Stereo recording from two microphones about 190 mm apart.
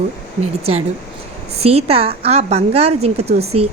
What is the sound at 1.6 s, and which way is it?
A woman's voice, 30° right (ahead or behind).